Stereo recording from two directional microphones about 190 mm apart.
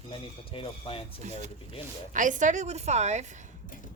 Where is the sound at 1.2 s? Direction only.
40° right (ahead or behind).